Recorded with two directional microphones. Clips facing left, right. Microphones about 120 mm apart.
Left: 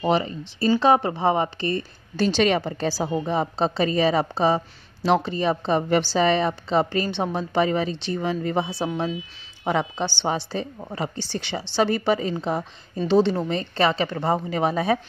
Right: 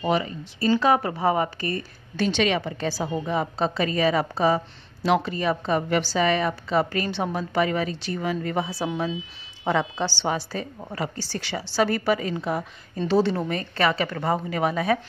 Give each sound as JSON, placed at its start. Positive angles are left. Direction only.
{"t": 0.0, "sound": "a woman's voice", "side_deg": 30}